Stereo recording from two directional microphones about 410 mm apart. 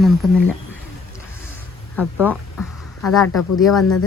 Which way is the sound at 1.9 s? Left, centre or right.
Centre.